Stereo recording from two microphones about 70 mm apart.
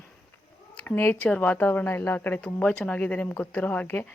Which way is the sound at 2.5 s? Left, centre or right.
Centre.